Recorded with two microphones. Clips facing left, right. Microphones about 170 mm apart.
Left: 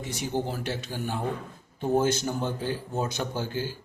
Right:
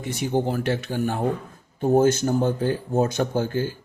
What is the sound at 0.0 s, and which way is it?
Speech, 55° right (ahead or behind).